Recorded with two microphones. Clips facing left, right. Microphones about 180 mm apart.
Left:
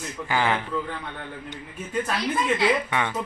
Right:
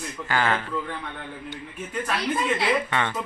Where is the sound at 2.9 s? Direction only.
10° left (ahead or behind).